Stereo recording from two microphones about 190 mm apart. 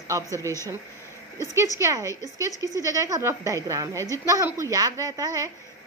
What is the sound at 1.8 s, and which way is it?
A woman's voice, 15° right (ahead or behind).